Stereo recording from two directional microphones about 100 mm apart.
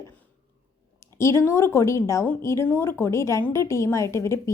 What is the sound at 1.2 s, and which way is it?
Speech, 25° left (ahead or behind).